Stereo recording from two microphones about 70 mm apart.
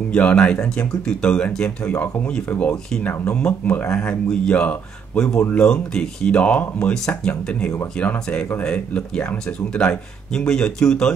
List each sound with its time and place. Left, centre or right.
0.1 s speech: centre